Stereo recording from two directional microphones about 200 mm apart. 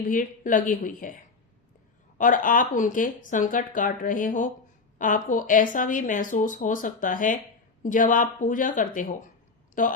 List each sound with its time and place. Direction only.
0.1 s speech: 40° left (ahead or behind)